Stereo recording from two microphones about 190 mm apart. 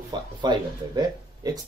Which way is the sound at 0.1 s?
20° right (ahead or behind).